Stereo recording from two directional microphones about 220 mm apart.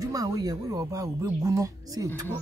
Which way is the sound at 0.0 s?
15° right (ahead or behind).